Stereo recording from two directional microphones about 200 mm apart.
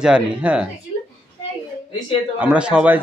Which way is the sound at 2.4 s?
5° right (ahead or behind).